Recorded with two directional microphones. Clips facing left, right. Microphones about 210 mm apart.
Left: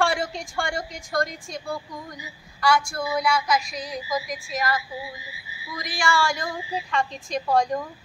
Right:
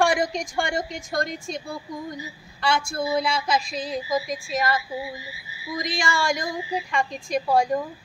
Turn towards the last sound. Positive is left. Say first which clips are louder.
# right 1 dB
turn(degrees=-10)  # may be behind; listen again after turning